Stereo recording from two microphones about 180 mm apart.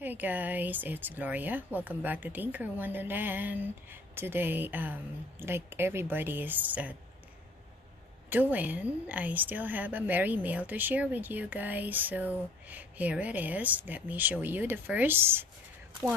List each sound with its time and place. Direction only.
0.0 s a woman's voice: 10° right (ahead or behind)
8.3 s a woman's voice: 10° right (ahead or behind)